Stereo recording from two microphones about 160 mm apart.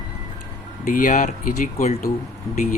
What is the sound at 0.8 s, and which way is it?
Speech, 55° left (ahead or behind).